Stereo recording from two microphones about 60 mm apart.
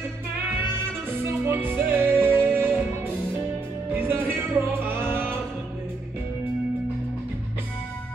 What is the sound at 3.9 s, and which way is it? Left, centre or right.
Music, right.